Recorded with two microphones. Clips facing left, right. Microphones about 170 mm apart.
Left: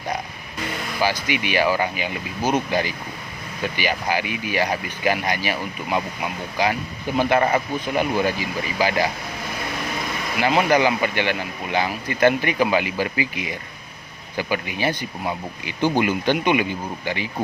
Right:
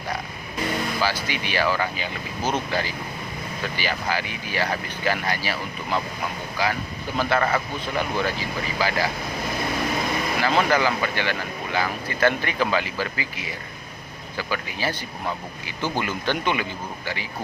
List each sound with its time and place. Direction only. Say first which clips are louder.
1.0 s a man's voice: left 3 dB; 15° left (ahead or behind)
10.7 s speech: left 3 dB; 20° left (ahead or behind)